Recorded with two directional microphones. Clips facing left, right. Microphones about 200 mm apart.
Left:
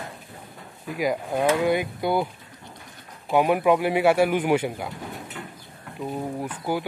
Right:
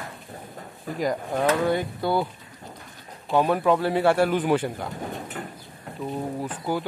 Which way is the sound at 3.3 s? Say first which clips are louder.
Left 1 dB; 15° left (ahead or behind).